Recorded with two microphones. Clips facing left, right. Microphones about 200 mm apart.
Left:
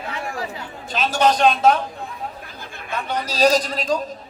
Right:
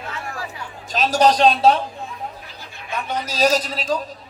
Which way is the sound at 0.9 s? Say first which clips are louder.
Right 2 dB; 40° right (ahead or behind).